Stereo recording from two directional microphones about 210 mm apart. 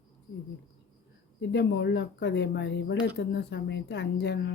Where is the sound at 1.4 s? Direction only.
55° left (ahead or behind).